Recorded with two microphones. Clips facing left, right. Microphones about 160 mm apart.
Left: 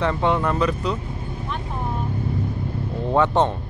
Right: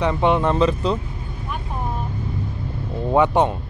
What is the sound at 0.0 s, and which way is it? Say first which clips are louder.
Speech: right 2 dB; 15° right (ahead or behind).